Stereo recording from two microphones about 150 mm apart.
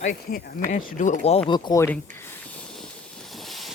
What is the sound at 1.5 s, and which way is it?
Speech, 30° left (ahead or behind).